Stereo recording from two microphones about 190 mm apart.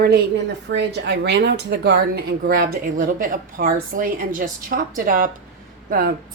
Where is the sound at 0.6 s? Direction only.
65° right (ahead or behind).